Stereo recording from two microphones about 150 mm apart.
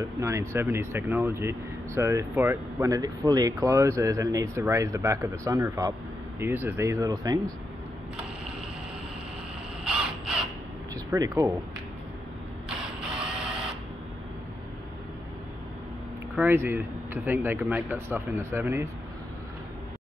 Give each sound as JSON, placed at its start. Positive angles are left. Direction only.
{"t": 0.0, "sound": "speech", "side_deg": -20}
{"t": 11.1, "sound": "speech", "side_deg": -20}
{"t": 13.2, "sound": "printer", "side_deg": -5}
{"t": 16.3, "sound": "speech", "side_deg": -15}